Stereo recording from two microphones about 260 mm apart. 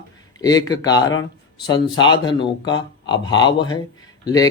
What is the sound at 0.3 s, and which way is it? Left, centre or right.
Speech, centre.